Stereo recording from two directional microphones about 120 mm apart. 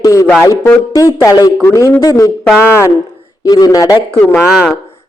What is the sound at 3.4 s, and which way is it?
Speech, 30° left (ahead or behind).